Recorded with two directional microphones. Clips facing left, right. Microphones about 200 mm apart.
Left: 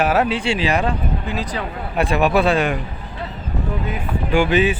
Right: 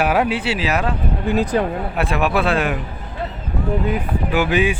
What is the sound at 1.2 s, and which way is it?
Speech, 50° right (ahead or behind).